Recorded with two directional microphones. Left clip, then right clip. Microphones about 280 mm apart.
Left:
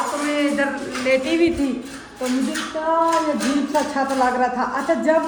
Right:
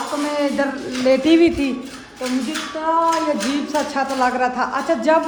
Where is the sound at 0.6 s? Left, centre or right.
Centre.